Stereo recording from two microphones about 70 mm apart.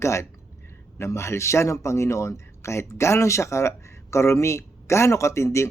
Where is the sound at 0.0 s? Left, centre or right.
Left.